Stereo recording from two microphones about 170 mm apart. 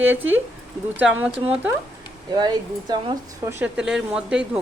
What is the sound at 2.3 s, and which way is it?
Speech, 25° right (ahead or behind).